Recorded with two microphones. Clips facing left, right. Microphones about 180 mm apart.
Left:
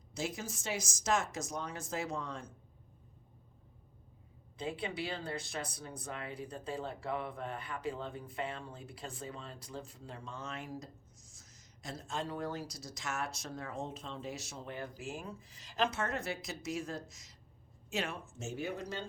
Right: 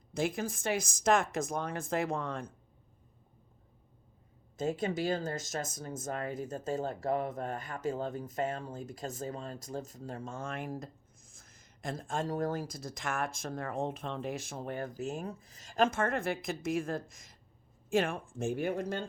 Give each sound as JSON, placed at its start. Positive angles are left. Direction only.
{"t": 0.1, "sound": "speech", "side_deg": -55}
{"t": 4.5, "sound": "speech", "side_deg": -45}